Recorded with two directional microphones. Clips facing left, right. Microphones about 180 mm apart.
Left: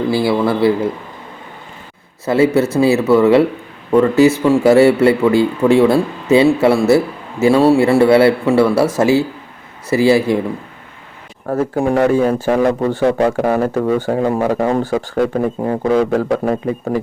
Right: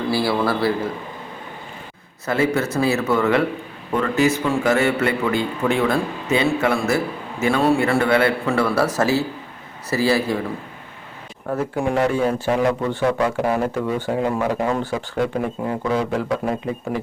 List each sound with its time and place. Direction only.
0.1 s speech: 20° left (ahead or behind)
2.2 s speech: 30° left (ahead or behind)
9.9 s speech: 25° left (ahead or behind)
11.4 s speech: 45° left (ahead or behind)